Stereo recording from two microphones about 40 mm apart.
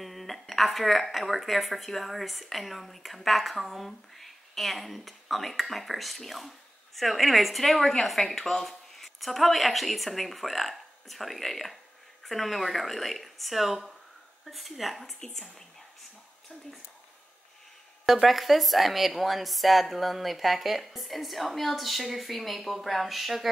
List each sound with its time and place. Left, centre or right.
0.0 s speech: centre
18.0 s speech: centre